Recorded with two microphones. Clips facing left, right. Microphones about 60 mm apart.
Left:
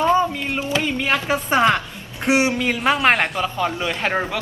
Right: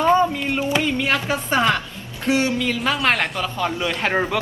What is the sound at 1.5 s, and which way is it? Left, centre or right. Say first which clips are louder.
A woman's voice: left 3 dB; left.